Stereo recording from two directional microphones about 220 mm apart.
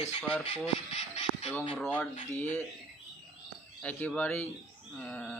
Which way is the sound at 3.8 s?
5° left (ahead or behind).